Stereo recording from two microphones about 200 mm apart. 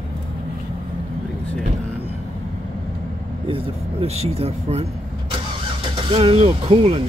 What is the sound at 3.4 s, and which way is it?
Speech, 30° right (ahead or behind).